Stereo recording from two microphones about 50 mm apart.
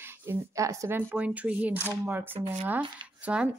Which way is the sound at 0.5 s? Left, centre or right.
Right.